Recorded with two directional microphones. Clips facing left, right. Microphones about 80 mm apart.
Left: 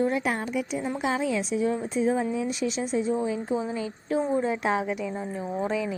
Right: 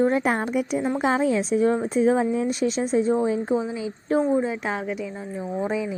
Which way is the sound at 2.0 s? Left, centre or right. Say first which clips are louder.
Right 4 dB; right.